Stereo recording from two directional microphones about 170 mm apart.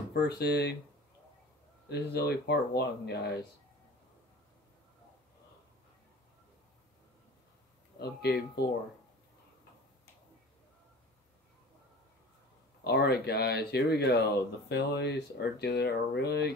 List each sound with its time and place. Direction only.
0.1 s speech: 80° left
1.9 s speech: 70° left (ahead or behind)
8.0 s speech: 75° left (ahead or behind)
12.8 s speech: 75° left (ahead or behind)